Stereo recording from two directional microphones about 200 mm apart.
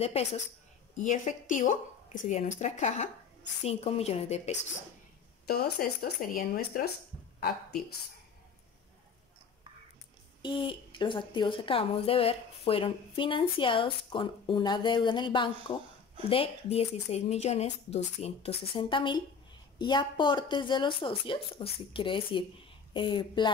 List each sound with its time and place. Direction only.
0.0 s speech: 30° left (ahead or behind)
5.5 s a woman's voice: 50° left (ahead or behind)
10.4 s a woman's voice: 25° left (ahead or behind)